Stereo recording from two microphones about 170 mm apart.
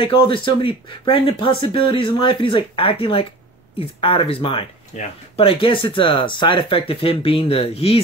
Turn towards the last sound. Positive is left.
turn(degrees=35)  # may be behind; listen again after turning